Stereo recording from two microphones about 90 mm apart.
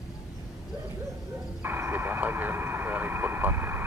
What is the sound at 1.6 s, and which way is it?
Vehicle, 20° right (ahead or behind).